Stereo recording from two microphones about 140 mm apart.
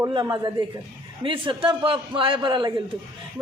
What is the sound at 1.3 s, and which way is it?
A man's voice, 35° right (ahead or behind).